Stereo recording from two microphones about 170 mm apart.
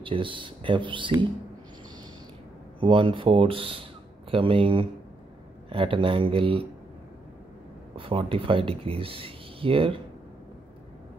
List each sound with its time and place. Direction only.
0.0 s speech: 30° right (ahead or behind)
2.8 s speech: 30° right (ahead or behind)
7.9 s speech: 30° right (ahead or behind)